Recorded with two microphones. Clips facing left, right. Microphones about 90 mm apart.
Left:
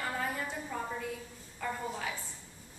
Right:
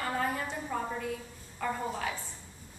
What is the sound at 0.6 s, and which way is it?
A woman's voice, 15° right (ahead or behind).